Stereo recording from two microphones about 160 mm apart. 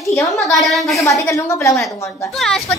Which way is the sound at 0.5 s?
Centre (ahead or behind).